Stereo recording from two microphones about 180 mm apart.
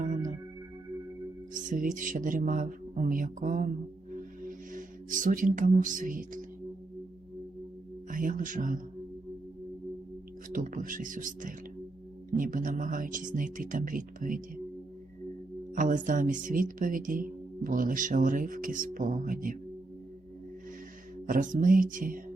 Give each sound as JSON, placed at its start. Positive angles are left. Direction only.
{"t": 1.5, "sound": "speech", "side_deg": -45}
{"t": 8.1, "sound": "speech", "side_deg": -50}
{"t": 10.5, "sound": "speech", "side_deg": -45}
{"t": 15.7, "sound": "speech", "side_deg": -45}
{"t": 21.2, "sound": "speech", "side_deg": -50}